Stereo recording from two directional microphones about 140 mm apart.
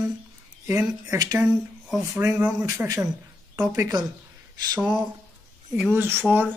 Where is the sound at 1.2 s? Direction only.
25° right (ahead or behind).